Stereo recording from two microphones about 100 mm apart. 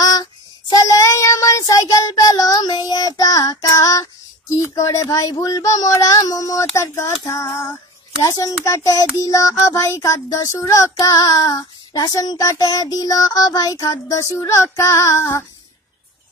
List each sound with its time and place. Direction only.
0.0 s child singing: 40° left (ahead or behind)
6.6 s speech: 30° left (ahead or behind)
8.2 s child singing: 35° left (ahead or behind)